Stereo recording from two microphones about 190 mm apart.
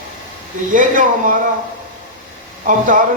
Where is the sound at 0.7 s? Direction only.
45° right (ahead or behind).